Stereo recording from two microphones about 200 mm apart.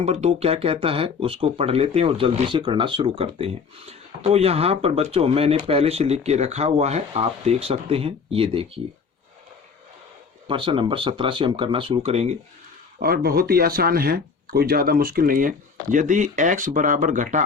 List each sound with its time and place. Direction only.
0.0 s speech: 30° right (ahead or behind)
10.5 s speech: 25° right (ahead or behind)
13.0 s speech: 50° right (ahead or behind)